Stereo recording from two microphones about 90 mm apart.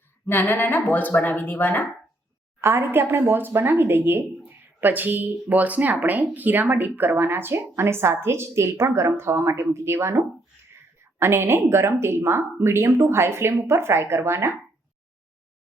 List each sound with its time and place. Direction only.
0.3 s speech: 20° left (ahead or behind)
2.6 s speech: 25° right (ahead or behind)